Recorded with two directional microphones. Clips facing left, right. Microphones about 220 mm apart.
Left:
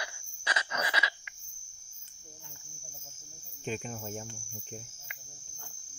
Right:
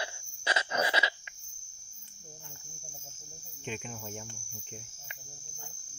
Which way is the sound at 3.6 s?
40° left (ahead or behind).